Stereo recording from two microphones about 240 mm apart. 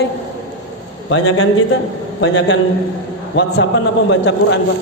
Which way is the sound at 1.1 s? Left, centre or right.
Left.